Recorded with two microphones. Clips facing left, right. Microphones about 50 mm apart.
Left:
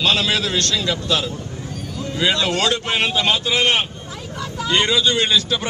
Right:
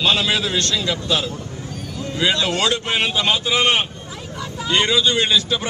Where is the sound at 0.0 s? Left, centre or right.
Centre.